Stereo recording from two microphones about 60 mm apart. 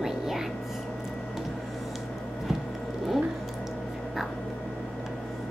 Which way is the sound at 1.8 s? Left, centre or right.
Centre.